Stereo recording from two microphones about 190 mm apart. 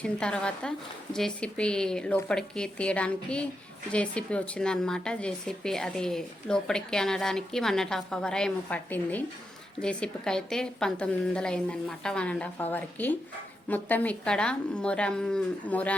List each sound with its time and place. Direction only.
0.0 s speech: 5° left (ahead or behind)